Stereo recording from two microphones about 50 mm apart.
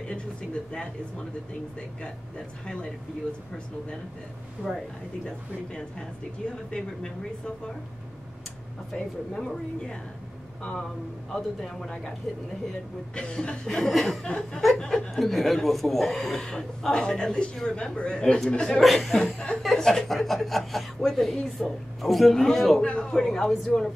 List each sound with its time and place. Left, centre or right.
0.7 s speech: centre
4.6 s speech: centre
5.2 s speech: centre
8.9 s speech: centre
13.1 s speech: centre
13.8 s a woman's voice: centre
14.2 s speech: centre
18.8 s a woman's voice: centre
22.8 s speech: centre
23.1 s speech: centre